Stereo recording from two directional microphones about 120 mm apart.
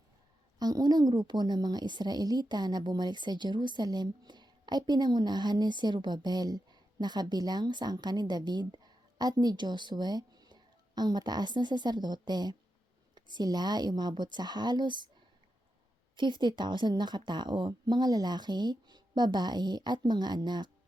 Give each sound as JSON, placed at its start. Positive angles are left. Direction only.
{"t": 0.6, "sound": "speech", "side_deg": -35}
{"t": 16.1, "sound": "speech", "side_deg": -40}